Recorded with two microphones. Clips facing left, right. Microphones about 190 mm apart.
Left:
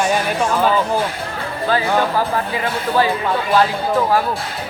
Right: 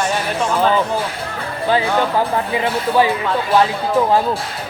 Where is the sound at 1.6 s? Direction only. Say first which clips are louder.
Right 1 dB; 20° right (ahead or behind).